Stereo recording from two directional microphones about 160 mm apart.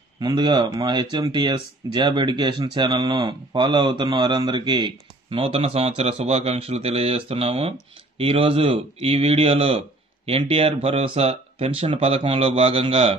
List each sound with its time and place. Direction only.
0.2 s speech: 30° right (ahead or behind)